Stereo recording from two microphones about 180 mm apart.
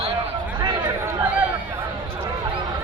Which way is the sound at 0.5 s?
20° right (ahead or behind).